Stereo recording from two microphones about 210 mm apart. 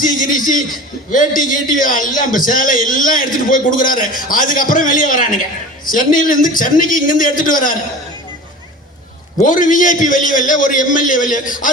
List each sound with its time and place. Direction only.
0.0 s a man's voice: 40° left (ahead or behind)
9.4 s a man's voice: 40° left (ahead or behind)